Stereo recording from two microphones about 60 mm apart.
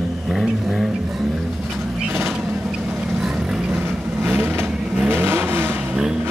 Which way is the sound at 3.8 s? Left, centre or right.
Right.